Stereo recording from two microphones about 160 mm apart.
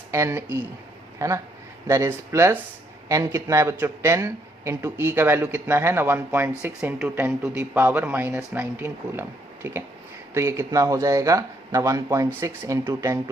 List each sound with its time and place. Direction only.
0.1 s speech: 15° right (ahead or behind)